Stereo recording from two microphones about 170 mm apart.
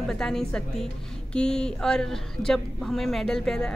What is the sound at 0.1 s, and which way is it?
A woman's voice, 5° left (ahead or behind).